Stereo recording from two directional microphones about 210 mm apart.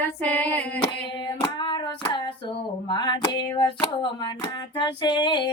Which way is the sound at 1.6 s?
20° left (ahead or behind).